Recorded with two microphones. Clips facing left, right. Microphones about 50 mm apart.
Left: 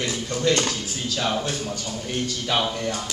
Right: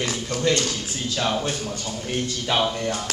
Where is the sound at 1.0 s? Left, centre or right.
Centre.